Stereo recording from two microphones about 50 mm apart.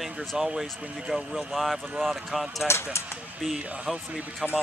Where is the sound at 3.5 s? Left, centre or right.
Centre.